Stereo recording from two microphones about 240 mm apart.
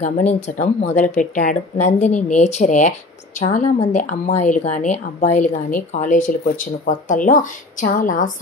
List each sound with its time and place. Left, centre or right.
0.3 s a woman's voice: left